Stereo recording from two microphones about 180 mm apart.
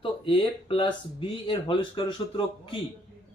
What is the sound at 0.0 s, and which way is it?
Speech, 30° left (ahead or behind).